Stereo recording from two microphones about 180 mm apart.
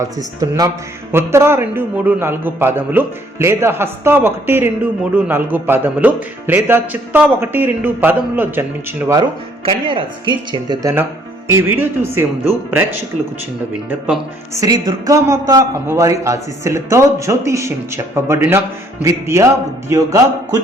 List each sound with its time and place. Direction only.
0.3 s a man's voice: 20° right (ahead or behind)
9.6 s speech: 25° right (ahead or behind)
11.4 s a man's voice: 15° right (ahead or behind)
14.5 s a man's voice: 20° right (ahead or behind)